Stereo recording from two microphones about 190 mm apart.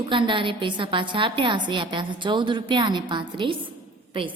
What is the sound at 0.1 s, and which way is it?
A woman's voice, 25° right (ahead or behind).